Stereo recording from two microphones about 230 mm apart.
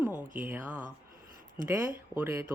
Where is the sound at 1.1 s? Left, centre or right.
Right.